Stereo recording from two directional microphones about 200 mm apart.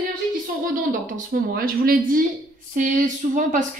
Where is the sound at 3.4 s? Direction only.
40° right (ahead or behind).